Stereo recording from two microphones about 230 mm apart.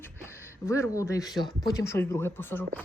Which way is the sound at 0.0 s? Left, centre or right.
Centre.